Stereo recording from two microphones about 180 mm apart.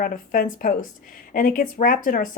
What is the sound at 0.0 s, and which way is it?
A woman's voice, 50° left (ahead or behind).